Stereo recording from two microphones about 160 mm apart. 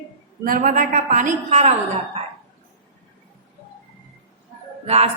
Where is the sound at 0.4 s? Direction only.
60° right (ahead or behind).